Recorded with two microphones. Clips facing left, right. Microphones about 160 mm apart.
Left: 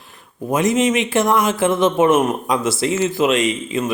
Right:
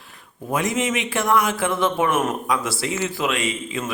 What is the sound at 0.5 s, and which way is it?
Speech, 25° left (ahead or behind).